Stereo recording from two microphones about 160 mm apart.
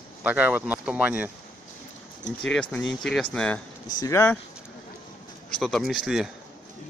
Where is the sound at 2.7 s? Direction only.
5° left (ahead or behind).